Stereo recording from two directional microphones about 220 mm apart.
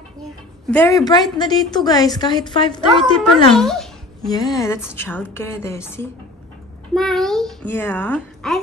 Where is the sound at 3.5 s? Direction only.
Centre (ahead or behind).